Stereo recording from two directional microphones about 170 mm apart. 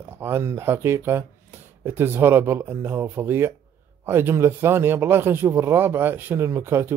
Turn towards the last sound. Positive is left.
turn(degrees=-15)  # may be behind; listen again after turning